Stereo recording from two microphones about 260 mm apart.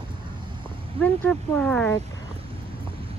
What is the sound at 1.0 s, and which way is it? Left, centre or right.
Speech, centre.